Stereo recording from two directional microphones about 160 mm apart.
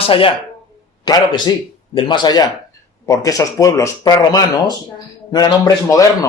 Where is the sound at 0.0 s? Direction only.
35° left (ahead or behind).